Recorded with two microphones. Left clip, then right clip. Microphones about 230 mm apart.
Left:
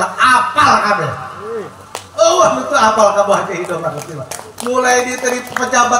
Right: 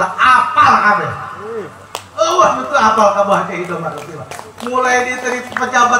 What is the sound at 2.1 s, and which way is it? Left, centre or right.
A man's voice, left.